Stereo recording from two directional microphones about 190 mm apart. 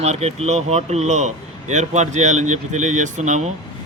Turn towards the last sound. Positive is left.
turn(degrees=-40)  # may be behind; listen again after turning